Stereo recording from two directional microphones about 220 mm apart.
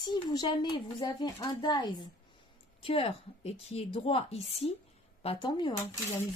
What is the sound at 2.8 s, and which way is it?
Speech, 25° left (ahead or behind).